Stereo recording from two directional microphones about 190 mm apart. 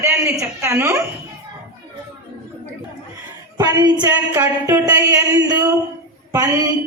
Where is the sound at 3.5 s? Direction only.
20° right (ahead or behind).